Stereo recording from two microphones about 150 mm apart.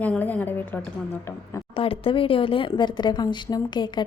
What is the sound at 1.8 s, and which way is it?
Speech, 40° left (ahead or behind).